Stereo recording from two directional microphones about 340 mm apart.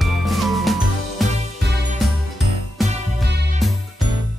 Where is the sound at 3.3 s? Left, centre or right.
Right.